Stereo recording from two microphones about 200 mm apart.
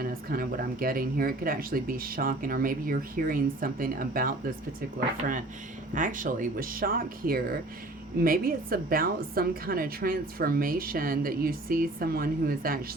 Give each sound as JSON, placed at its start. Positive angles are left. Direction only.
{"t": 0.0, "sound": "a woman's voice", "side_deg": -50}
{"t": 5.9, "sound": "a woman's voice", "side_deg": -40}